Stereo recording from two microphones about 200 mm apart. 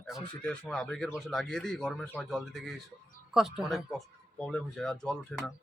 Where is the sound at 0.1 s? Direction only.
5° left (ahead or behind).